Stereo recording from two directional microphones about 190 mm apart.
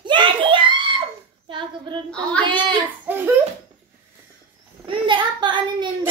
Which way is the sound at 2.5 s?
25° right (ahead or behind).